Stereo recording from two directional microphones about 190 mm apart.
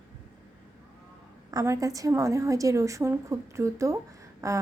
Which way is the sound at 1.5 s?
15° right (ahead or behind).